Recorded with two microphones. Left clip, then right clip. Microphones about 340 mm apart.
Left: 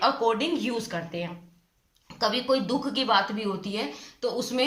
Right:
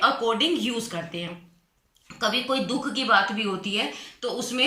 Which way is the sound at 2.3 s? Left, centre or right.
Left.